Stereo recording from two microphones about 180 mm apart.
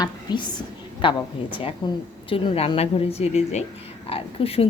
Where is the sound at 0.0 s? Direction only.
25° left (ahead or behind).